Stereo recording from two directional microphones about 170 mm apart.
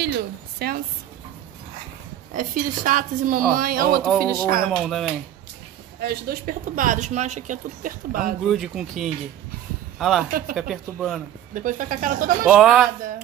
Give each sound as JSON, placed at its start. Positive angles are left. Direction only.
{"t": 0.6, "sound": "speech", "side_deg": -65}
{"t": 2.3, "sound": "speech", "side_deg": -50}
{"t": 4.0, "sound": "speech", "side_deg": 5}
{"t": 5.9, "sound": "speech", "side_deg": -65}
{"t": 8.5, "sound": "speech", "side_deg": 0}
{"t": 11.5, "sound": "speech", "side_deg": -50}
{"t": 12.4, "sound": "speech", "side_deg": 0}